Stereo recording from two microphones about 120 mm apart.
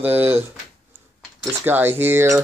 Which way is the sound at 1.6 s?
15° right (ahead or behind).